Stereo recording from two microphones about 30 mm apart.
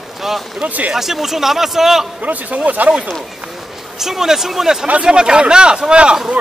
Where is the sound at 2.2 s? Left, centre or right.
Right.